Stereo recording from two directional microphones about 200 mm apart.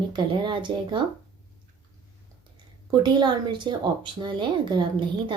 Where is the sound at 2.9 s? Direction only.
20° right (ahead or behind).